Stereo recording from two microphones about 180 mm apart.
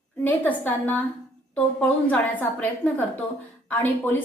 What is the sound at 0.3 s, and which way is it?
A woman's voice, 10° left (ahead or behind).